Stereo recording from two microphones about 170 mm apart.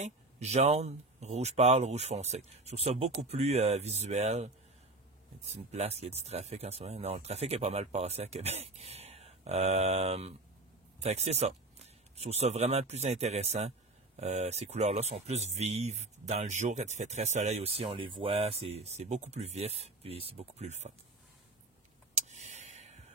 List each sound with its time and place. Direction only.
0.0 s speech: 40° right (ahead or behind)
5.5 s speech: 40° right (ahead or behind)
22.1 s a sound: 45° right (ahead or behind)